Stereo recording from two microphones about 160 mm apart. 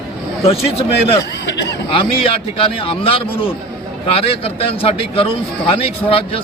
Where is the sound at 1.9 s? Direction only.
35° left (ahead or behind).